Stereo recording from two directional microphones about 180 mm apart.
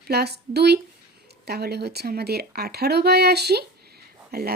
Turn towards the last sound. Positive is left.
turn(degrees=-60)  # may be behind; listen again after turning